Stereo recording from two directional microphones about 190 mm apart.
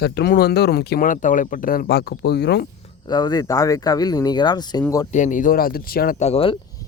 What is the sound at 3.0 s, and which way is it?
Speech, 20° left (ahead or behind).